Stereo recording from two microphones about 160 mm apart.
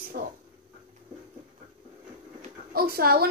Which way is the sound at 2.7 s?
70° right (ahead or behind).